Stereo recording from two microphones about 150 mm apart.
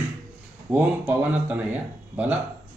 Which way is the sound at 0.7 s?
10° right (ahead or behind).